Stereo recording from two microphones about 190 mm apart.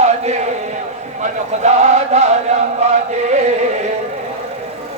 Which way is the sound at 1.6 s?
35° right (ahead or behind).